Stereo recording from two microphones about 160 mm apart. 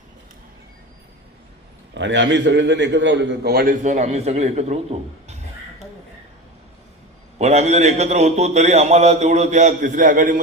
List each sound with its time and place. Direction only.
2.0 s a man's voice: 90° right; by 3.8 s 70° right (ahead or behind)
3.8 s a man's voice: 45° right (ahead or behind)
7.3 s a man's voice: 45° right (ahead or behind)